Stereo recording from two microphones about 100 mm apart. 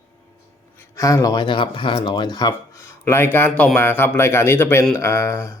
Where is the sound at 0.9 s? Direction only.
35° left (ahead or behind).